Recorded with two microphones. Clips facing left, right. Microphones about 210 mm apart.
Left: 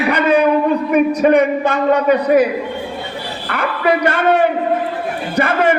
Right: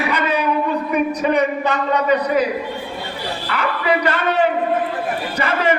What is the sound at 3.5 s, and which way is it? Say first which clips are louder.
A man's voice: left 3 dB; 50° left (ahead or behind).